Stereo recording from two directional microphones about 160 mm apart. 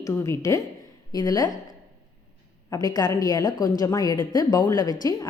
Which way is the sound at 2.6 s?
25° left (ahead or behind).